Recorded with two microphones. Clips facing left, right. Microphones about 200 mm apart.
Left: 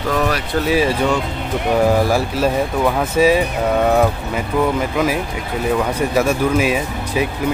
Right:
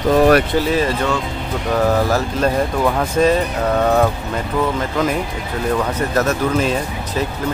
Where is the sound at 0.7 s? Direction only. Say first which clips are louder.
Left 2 dB; 10° left (ahead or behind).